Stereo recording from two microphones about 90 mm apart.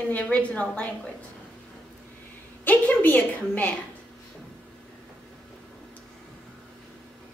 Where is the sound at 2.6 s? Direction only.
20° left (ahead or behind).